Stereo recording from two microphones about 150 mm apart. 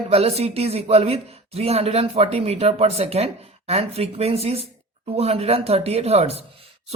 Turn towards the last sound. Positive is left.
turn(degrees=-45)  # may be behind; listen again after turning